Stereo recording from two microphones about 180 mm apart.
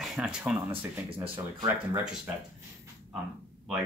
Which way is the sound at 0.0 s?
5° right (ahead or behind).